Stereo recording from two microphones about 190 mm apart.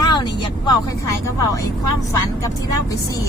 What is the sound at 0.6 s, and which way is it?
Speech, 20° left (ahead or behind).